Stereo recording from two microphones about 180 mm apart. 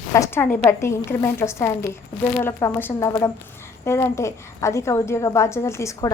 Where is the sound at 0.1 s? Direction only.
15° left (ahead or behind).